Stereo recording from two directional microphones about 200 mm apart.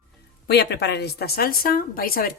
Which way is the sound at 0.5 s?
55° left (ahead or behind).